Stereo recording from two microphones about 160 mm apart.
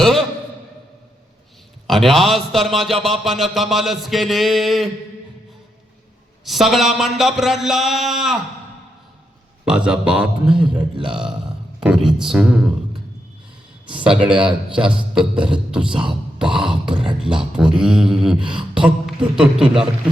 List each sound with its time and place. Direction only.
1.9 s speech: centre (ahead or behind)
6.4 s speech: centre (ahead or behind)
9.6 s speech: 5° right (ahead or behind)
10.5 s a sound: 30° right (ahead or behind)
11.0 s speech: 5° right (ahead or behind)
11.8 s a sound: 5° right (ahead or behind)
13.9 s speech: 5° right (ahead or behind)